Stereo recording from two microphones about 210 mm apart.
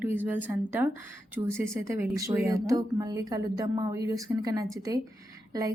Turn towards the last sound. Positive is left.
turn(degrees=-15)  # may be behind; listen again after turning